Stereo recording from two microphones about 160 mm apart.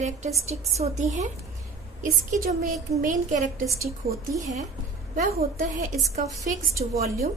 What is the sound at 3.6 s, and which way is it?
Speech, 20° right (ahead or behind).